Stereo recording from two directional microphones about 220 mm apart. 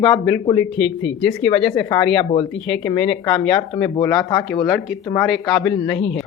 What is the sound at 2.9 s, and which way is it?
Speech, 20° left (ahead or behind).